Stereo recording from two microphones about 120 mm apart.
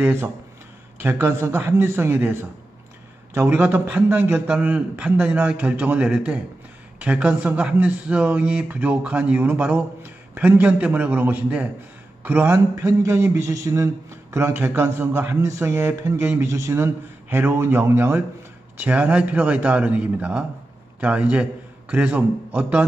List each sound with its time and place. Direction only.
0.0 s a man's voice: 20° right (ahead or behind)
3.3 s a man's voice: 15° right (ahead or behind)